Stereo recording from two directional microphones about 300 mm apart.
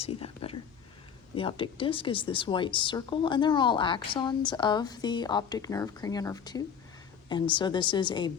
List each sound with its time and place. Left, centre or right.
0.0 s speech: centre